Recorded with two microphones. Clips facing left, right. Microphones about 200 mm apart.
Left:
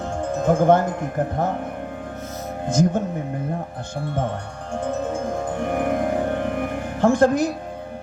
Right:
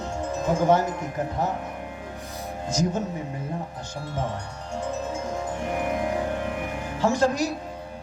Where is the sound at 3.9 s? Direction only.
55° left (ahead or behind).